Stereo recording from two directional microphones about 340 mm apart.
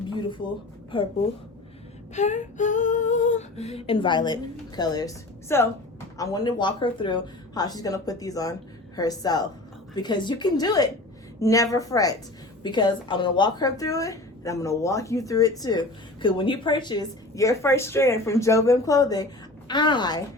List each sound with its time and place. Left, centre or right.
0.9 s a woman's voice: centre
2.1 s a woman's voice: left